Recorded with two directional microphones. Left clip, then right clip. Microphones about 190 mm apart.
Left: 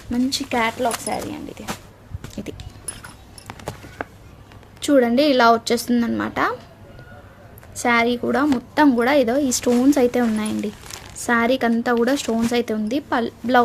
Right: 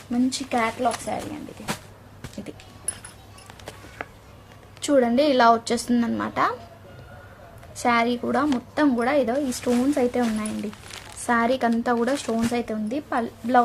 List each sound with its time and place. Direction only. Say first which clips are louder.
0.3 s speech: left 5 dB; 30° left (ahead or behind)
2.3 s music: left 5 dB; 40° left (ahead or behind)
3.4 s a sound: left 8 dB; 40° left (ahead or behind)
4.8 s a woman's voice: left 3 dB; 25° left (ahead or behind)
7.8 s a woman's voice: left 3 dB; 25° left (ahead or behind); by 10.7 s 40° left (ahead or behind)
11.3 s speech: left 3 dB; 30° left (ahead or behind)